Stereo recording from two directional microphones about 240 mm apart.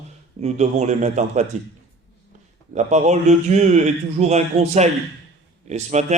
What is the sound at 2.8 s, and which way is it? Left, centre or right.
A man's voice, right.